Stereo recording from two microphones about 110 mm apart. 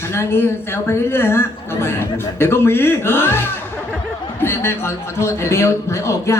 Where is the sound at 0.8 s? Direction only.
20° left (ahead or behind).